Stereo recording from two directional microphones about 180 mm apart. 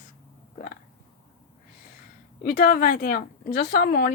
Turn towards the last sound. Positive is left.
turn(degrees=60)  # may be behind; listen again after turning